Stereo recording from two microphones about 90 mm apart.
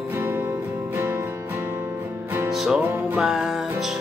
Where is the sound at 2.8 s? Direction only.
20° right (ahead or behind).